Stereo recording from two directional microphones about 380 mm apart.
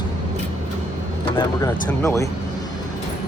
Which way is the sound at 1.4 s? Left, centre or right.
Centre.